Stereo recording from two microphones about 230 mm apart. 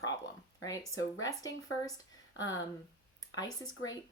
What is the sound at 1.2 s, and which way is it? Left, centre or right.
Speech, centre.